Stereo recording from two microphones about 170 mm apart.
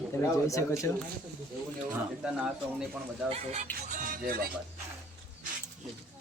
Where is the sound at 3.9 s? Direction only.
50° right (ahead or behind).